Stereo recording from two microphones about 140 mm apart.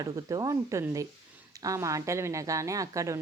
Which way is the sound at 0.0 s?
25° right (ahead or behind).